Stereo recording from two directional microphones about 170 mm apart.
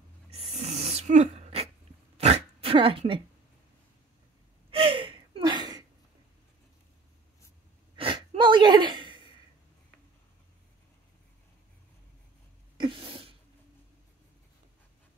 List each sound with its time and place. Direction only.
0.3 s gasp: 35° right (ahead or behind)
2.1 s dog: 35° right (ahead or behind)
4.6 s gasp: 30° right (ahead or behind)
7.9 s gasp: 30° right (ahead or behind)
12.7 s a sound: 30° right (ahead or behind)